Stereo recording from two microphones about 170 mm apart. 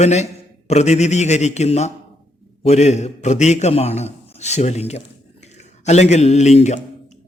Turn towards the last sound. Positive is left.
turn(degrees=40)  # may be behind; listen again after turning